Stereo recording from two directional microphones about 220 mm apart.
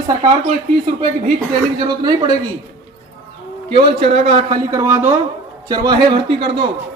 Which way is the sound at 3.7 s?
25° right (ahead or behind).